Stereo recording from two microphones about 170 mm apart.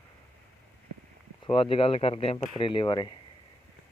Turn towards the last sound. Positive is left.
turn(degrees=25)  # may be behind; listen again after turning